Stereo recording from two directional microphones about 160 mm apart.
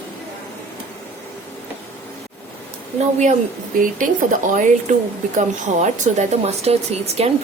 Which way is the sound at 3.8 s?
55° right (ahead or behind).